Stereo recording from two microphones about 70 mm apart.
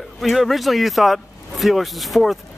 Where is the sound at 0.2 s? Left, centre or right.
Centre.